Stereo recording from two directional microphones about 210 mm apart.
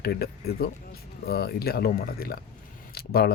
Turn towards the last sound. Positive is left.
turn(degrees=45)  # may be behind; listen again after turning